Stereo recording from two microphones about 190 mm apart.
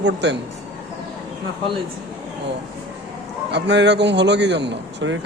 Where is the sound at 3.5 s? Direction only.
65° right (ahead or behind).